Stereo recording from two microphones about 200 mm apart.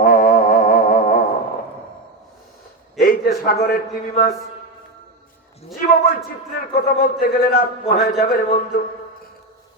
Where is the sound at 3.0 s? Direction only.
45° left (ahead or behind).